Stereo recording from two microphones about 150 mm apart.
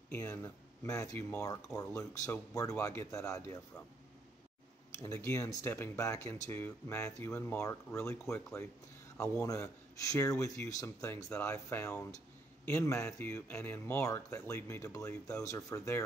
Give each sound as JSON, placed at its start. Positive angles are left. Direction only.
{"t": 0.1, "sound": "speech", "side_deg": 20}
{"t": 4.9, "sound": "speech", "side_deg": 20}